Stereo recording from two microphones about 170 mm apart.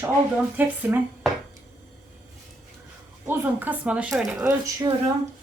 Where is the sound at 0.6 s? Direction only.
10° right (ahead or behind).